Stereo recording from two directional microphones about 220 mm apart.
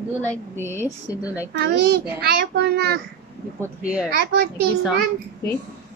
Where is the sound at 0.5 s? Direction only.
10° right (ahead or behind).